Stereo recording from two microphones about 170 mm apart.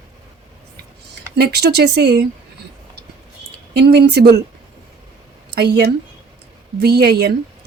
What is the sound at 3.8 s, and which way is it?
Speech, 85° right.